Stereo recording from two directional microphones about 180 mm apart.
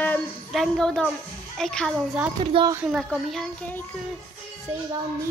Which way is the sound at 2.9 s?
Centre (ahead or behind).